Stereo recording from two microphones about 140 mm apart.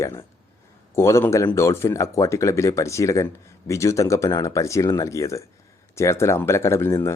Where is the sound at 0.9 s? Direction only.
20° left (ahead or behind).